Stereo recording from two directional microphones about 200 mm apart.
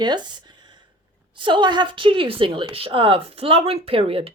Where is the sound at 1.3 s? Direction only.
25° right (ahead or behind).